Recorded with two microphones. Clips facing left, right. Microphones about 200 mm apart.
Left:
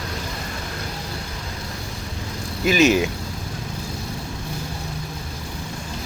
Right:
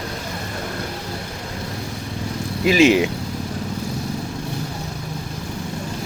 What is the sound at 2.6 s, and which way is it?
Speech, 30° right (ahead or behind).